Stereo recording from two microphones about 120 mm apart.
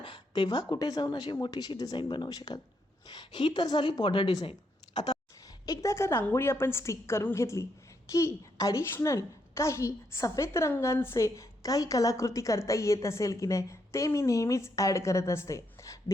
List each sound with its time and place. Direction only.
0.0 s speech: 40° left (ahead or behind)
5.6 s a woman's voice: 25° left (ahead or behind)